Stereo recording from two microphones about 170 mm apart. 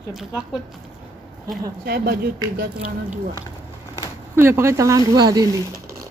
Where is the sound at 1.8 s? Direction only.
65° right (ahead or behind).